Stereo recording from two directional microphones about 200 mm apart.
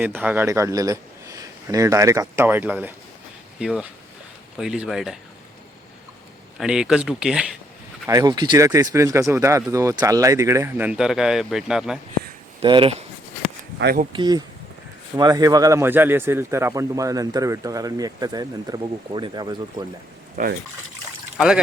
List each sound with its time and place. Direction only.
0.0 s speech: 10° right (ahead or behind)
6.6 s speech: 5° right (ahead or behind)
8.0 s speech: 20° right (ahead or behind); by 11.9 s centre (ahead or behind)
12.6 s speech: 25° right (ahead or behind)
13.7 s speech: 55° right (ahead or behind)
14.1 s speech: 20° right (ahead or behind)
20.3 s speech: 45° right (ahead or behind)
21.3 s speech: 5° right (ahead or behind)